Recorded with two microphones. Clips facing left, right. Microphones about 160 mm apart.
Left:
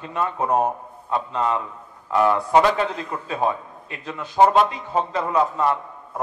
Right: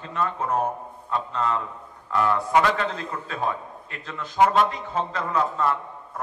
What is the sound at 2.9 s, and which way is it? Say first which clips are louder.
A man's voice: left 4 dB; 15° left (ahead or behind).